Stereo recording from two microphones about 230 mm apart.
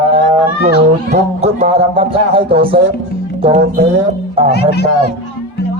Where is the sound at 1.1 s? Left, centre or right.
Right.